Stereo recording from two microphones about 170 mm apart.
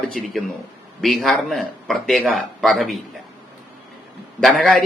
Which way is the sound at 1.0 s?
Centre (ahead or behind).